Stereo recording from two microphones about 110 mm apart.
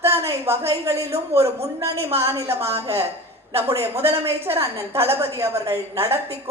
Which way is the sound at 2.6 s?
65° right (ahead or behind).